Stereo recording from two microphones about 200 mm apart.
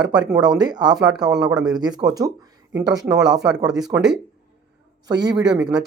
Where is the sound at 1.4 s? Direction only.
20° right (ahead or behind).